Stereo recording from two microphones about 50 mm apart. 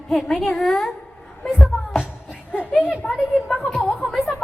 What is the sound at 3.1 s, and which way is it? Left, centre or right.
Speech, centre.